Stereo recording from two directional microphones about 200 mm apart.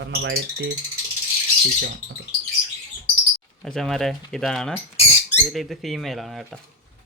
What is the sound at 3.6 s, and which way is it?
Speech, centre (ahead or behind).